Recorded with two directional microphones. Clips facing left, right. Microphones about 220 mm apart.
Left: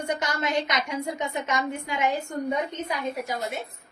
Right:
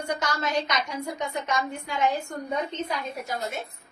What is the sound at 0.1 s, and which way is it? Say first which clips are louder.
A woman's voice: even; 20° left (ahead or behind).